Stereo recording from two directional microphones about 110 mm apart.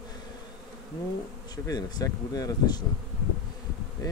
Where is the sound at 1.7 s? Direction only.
35° left (ahead or behind).